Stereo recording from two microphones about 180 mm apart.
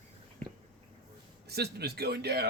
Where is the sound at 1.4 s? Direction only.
65° right (ahead or behind).